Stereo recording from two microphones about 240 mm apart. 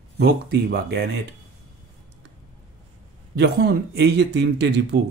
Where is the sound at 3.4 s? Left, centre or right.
Right.